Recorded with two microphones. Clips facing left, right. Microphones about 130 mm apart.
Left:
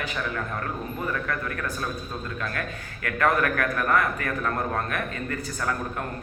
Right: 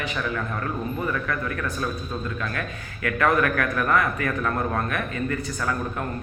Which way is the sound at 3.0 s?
45° left (ahead or behind).